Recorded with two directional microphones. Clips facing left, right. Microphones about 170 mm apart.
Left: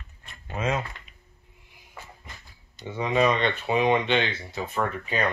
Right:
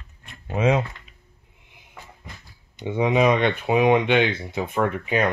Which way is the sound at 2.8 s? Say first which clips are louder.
Right 4 dB; 15° right (ahead or behind).